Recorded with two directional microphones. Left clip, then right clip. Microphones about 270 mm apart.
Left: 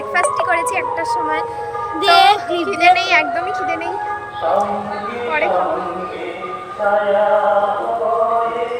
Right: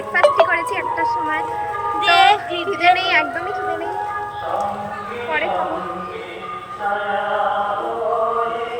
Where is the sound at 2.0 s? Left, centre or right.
Centre.